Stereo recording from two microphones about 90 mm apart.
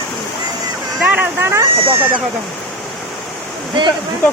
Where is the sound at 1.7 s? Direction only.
90° right.